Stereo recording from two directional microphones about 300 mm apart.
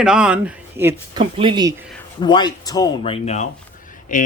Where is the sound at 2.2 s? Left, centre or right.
Centre.